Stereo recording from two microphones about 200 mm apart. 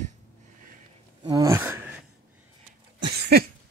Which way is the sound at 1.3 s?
15° right (ahead or behind).